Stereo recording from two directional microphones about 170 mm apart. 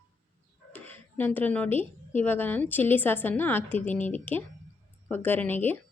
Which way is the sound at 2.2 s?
10° left (ahead or behind).